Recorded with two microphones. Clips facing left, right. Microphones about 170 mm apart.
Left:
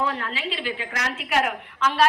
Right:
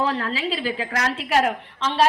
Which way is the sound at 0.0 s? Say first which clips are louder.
Right 4 dB; 35° right (ahead or behind).